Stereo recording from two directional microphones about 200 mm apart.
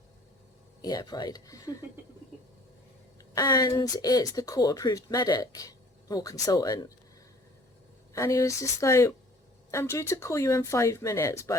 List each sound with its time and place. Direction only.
0.8 s speech: 20° left (ahead or behind)
3.3 s speech: 20° left (ahead or behind)
8.1 s speech: 15° left (ahead or behind)